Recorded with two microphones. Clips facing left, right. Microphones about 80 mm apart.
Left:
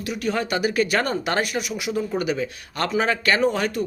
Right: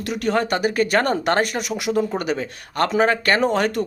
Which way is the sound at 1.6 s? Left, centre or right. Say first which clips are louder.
Right 4 dB; right.